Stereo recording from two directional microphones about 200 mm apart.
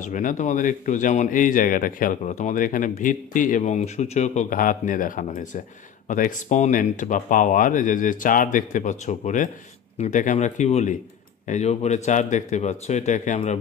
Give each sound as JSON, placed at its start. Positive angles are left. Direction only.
{"t": 0.0, "sound": "speech", "side_deg": 40}